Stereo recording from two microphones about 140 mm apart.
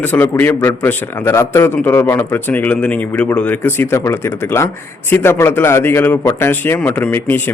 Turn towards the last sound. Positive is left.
turn(degrees=15)  # may be behind; listen again after turning